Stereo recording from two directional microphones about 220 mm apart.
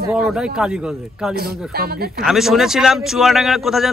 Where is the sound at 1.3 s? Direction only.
45° right (ahead or behind).